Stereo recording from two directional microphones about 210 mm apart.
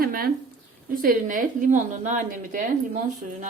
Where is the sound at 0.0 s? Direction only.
45° right (ahead or behind).